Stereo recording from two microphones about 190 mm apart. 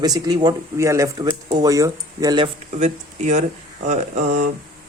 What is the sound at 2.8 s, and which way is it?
Speech, 40° right (ahead or behind).